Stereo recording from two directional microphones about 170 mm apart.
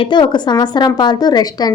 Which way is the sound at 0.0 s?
25° left (ahead or behind).